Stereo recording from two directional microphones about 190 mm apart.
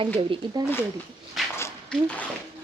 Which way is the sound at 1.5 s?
10° left (ahead or behind).